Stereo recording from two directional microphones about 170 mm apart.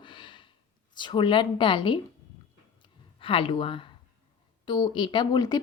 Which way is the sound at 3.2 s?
30° left (ahead or behind).